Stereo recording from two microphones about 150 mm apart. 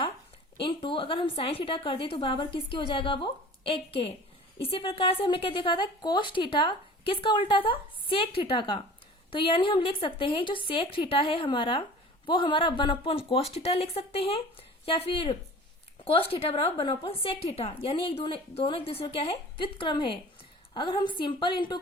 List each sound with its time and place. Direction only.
0.6 s a woman's voice: 35° left (ahead or behind)